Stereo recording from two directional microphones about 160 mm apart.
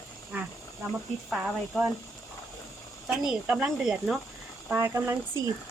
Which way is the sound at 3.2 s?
5° right (ahead or behind).